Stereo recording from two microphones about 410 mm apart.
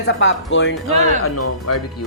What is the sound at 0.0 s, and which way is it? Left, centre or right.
Speech, left.